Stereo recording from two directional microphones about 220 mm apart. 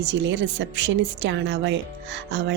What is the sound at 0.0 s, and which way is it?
Speech, 55° right (ahead or behind).